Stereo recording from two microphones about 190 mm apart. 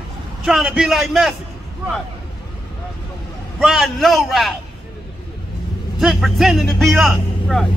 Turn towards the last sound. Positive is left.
turn(degrees=0)  # may be behind; listen again after turning